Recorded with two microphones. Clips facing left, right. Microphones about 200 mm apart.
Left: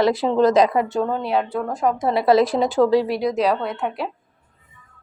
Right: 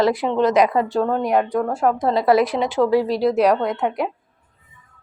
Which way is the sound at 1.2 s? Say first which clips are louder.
Right 3 dB; 15° right (ahead or behind).